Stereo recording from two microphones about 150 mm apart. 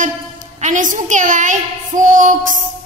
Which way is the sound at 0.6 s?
55° right (ahead or behind).